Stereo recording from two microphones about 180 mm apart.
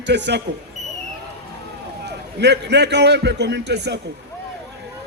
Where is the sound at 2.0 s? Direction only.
70° right (ahead or behind).